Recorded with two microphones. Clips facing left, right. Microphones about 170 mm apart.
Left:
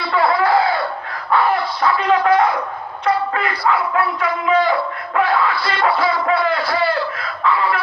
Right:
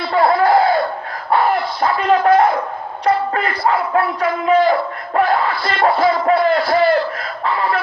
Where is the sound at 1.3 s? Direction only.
45° right (ahead or behind).